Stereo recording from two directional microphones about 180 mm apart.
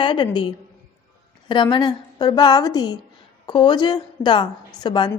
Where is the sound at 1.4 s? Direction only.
25° left (ahead or behind).